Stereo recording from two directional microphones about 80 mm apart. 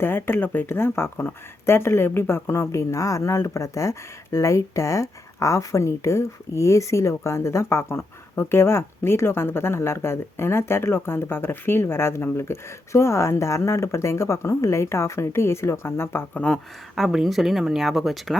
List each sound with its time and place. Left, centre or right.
0.0 s speech: left
16.9 s speech: centre